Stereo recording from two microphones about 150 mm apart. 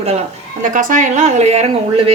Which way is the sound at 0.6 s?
60° right (ahead or behind).